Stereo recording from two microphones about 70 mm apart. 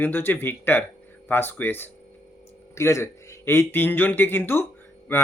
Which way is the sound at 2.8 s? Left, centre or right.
Left.